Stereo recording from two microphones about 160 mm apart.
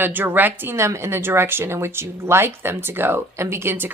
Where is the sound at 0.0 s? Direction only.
10° right (ahead or behind).